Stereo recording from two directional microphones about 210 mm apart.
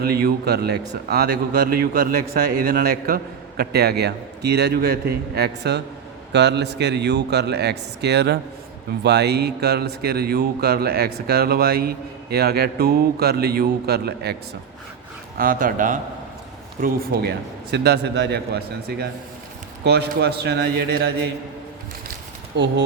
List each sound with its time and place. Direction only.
0.0 s speech: 50° right (ahead or behind)
15.4 s speech: 40° right (ahead or behind)
16.8 s speech: 50° right (ahead or behind)
22.5 s speech: 55° right (ahead or behind)